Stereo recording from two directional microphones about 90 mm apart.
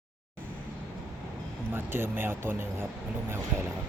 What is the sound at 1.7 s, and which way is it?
Speech, 25° right (ahead or behind).